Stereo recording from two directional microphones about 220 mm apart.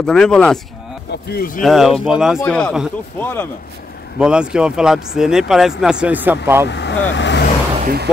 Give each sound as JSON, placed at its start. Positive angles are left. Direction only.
{"t": 0.0, "sound": "speech", "side_deg": 5}
{"t": 1.1, "sound": "speech", "side_deg": 45}
{"t": 1.6, "sound": "speech", "side_deg": 0}
{"t": 4.2, "sound": "speech", "side_deg": -5}
{"t": 6.7, "sound": "speech", "side_deg": 50}